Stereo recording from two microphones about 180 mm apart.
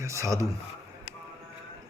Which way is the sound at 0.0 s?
15° right (ahead or behind).